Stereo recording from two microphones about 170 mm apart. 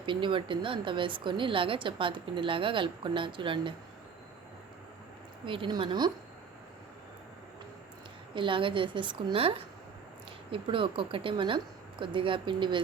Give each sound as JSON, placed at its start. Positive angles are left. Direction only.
{"t": 0.0, "sound": "a woman's voice", "side_deg": -30}
{"t": 5.5, "sound": "a woman's voice", "side_deg": -30}
{"t": 8.4, "sound": "a woman's voice", "side_deg": -30}